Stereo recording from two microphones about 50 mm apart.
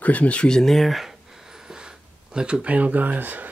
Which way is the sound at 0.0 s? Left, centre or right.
Left.